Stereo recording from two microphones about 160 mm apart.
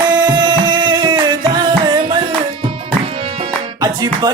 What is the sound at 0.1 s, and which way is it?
Music, 25° right (ahead or behind).